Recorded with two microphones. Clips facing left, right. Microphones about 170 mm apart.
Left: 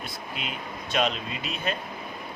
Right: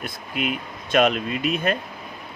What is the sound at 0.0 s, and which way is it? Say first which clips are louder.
Speech: right 8 dB; 55° right (ahead or behind).